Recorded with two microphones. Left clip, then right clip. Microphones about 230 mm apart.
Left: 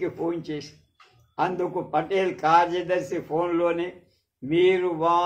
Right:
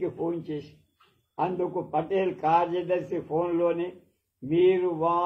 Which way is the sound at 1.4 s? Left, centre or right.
Left.